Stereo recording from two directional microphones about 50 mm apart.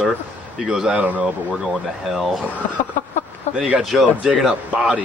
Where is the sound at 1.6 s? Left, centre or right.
Centre.